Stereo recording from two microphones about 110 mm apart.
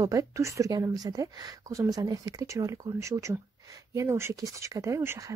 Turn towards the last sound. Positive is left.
turn(degrees=-25)  # may be behind; listen again after turning